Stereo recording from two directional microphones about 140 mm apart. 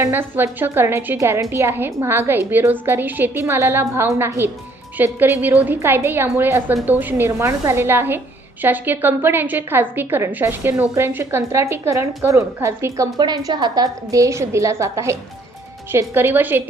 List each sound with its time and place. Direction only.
0.0 s a woman's voice: 15° right (ahead or behind)
13.1 s a woman's voice: 30° right (ahead or behind)